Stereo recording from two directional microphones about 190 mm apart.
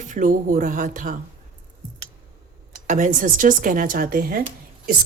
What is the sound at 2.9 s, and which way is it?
A woman's voice, 40° right (ahead or behind).